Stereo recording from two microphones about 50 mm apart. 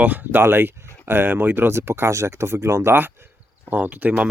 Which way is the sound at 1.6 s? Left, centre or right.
Right.